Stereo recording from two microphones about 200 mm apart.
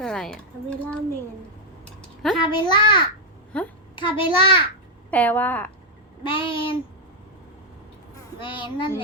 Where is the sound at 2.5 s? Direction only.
20° left (ahead or behind).